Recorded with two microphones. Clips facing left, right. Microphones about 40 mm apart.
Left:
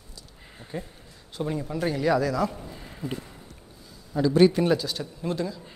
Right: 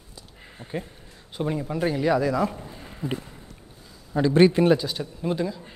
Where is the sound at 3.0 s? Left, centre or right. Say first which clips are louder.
Right 3 dB; right.